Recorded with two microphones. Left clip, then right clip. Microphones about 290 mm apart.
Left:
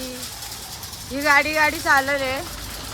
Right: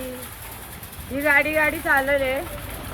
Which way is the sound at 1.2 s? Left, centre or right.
Centre.